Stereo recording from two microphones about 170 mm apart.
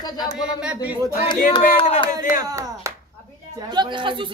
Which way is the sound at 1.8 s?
30° left (ahead or behind).